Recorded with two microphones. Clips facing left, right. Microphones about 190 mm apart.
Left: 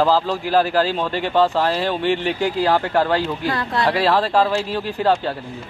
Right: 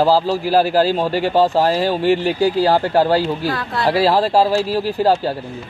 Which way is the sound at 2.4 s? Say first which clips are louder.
Right 4 dB; 35° right (ahead or behind).